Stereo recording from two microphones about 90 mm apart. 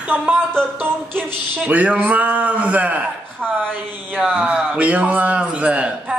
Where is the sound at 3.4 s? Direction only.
10° left (ahead or behind).